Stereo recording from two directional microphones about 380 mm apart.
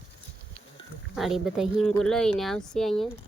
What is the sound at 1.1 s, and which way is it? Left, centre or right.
Speech, centre.